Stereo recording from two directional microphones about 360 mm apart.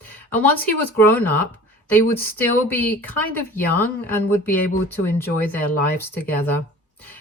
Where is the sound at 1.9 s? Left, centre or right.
Centre.